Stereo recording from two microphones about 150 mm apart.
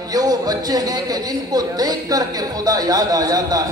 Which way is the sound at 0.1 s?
25° right (ahead or behind).